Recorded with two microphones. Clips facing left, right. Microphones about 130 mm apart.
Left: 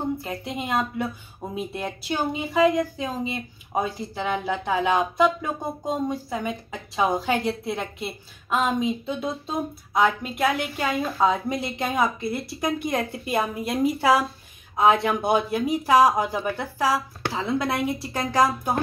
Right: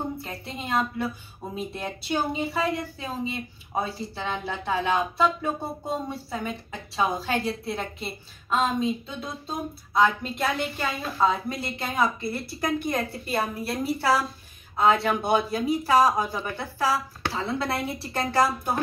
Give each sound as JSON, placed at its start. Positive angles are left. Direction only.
{"t": 0.2, "sound": "speech", "side_deg": 10}
{"t": 9.0, "sound": "a sound", "side_deg": 25}
{"t": 10.2, "sound": "speech", "side_deg": 10}